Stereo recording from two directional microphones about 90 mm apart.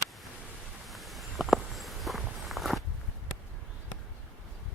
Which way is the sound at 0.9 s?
Centre (ahead or behind).